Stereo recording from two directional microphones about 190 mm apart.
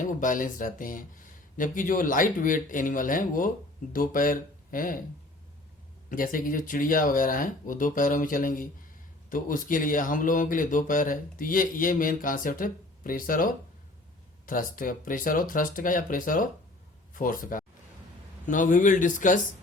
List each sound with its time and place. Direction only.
0.0 s speech: 45° left (ahead or behind)
6.1 s speech: 45° left (ahead or behind)